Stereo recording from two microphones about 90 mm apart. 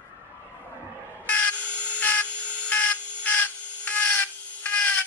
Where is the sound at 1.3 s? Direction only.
15° left (ahead or behind).